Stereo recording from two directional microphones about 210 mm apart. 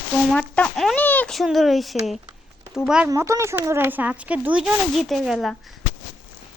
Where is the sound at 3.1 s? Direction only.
15° right (ahead or behind).